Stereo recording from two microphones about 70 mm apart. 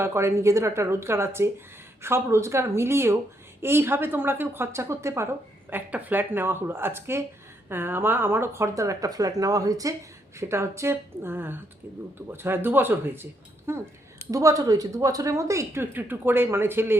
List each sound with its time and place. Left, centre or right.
0.0 s a woman's voice: right
5.7 s a woman's voice: right
10.5 s a woman's voice: right
14.3 s speech: right
15.8 s a woman's voice: right